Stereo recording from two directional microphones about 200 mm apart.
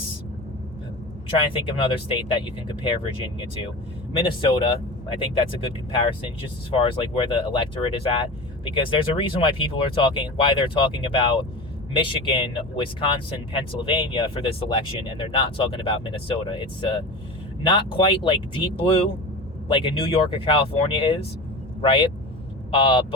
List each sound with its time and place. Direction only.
1.3 s speech: 25° left (ahead or behind)
6.7 s speech: 25° left (ahead or behind)